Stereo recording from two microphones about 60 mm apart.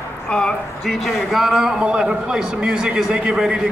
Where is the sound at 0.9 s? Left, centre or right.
Centre.